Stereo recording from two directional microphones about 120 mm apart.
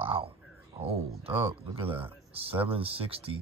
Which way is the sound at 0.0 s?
50° right (ahead or behind).